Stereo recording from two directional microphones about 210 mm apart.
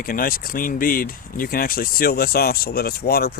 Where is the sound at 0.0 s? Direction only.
45° left (ahead or behind).